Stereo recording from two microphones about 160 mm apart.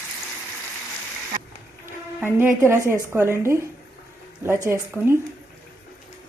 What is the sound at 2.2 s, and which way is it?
A woman's voice, 15° right (ahead or behind).